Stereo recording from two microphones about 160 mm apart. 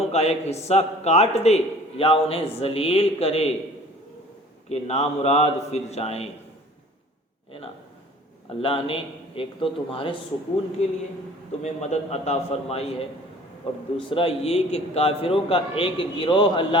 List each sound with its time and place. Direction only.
0.0 s a man's voice: 40° left (ahead or behind)
4.7 s a man's voice: 40° left (ahead or behind)
8.4 s a man's voice: 35° left (ahead or behind)